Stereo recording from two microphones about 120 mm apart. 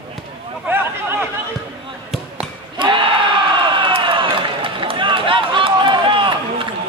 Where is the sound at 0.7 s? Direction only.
15° right (ahead or behind).